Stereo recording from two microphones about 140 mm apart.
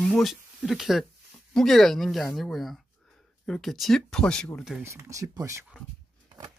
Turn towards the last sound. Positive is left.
turn(degrees=-20)  # may be behind; listen again after turning